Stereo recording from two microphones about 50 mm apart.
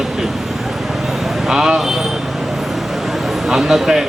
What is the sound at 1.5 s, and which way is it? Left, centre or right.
Speech, centre.